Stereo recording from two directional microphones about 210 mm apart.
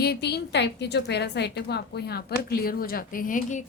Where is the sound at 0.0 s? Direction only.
50° left (ahead or behind).